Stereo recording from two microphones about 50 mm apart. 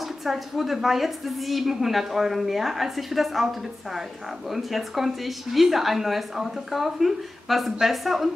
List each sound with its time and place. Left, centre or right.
0.2 s a woman's voice: centre
4.5 s a woman's voice: centre